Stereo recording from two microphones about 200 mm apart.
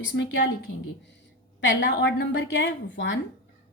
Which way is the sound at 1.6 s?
60° left (ahead or behind).